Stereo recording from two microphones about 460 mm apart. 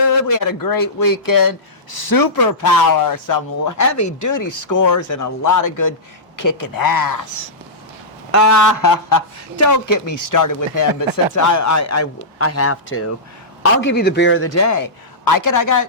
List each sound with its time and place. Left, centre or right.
0.1 s speech: left
8.3 s a man's voice: left